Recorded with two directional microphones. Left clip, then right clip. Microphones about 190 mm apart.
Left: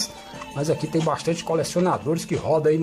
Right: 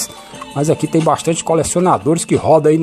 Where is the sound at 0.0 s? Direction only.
35° right (ahead or behind).